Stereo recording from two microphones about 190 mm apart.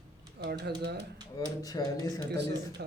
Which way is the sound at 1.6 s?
20° left (ahead or behind).